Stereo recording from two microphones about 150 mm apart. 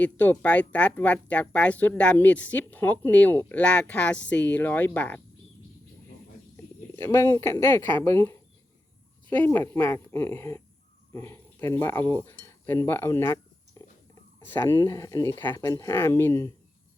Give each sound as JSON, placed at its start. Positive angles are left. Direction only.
{"t": 0.0, "sound": "speech", "side_deg": 10}
{"t": 6.9, "sound": "speech", "side_deg": 15}